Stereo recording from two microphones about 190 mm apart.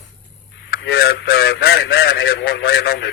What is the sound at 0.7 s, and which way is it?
Radio, 55° left (ahead or behind).